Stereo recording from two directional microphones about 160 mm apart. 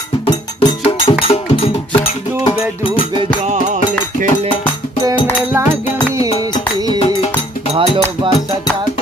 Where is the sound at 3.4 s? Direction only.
50° right (ahead or behind).